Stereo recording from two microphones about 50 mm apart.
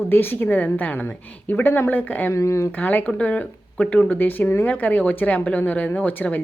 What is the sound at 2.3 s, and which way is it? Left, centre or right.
Speech, left.